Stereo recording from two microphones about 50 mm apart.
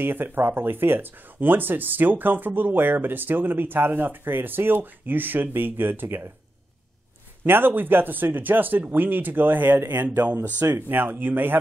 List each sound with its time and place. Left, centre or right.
0.0 s speech: right
7.4 s speech: right